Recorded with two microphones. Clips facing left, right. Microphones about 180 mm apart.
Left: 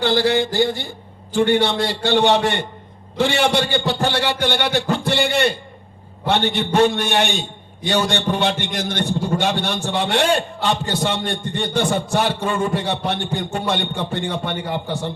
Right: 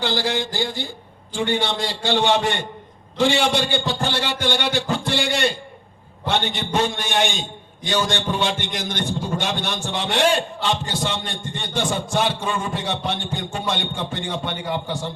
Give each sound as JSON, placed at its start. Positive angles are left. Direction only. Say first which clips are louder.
{"t": 0.0, "sound": "a man's voice", "louder": "left 6 dB", "side_deg": 60}